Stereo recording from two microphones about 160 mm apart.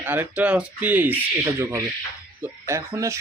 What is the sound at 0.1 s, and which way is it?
Speech, 10° right (ahead or behind).